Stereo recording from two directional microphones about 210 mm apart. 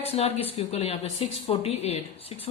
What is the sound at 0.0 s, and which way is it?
A woman's voice, 30° left (ahead or behind).